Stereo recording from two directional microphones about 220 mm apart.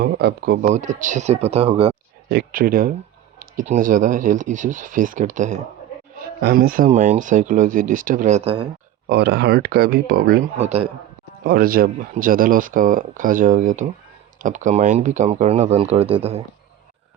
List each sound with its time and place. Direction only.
0.0 s speech: 45° right (ahead or behind)
0.6 s speech: 35° right (ahead or behind)
2.3 s speech: 40° right (ahead or behind)
9.0 s speech: 50° right (ahead or behind); by 16.4 s 25° right (ahead or behind)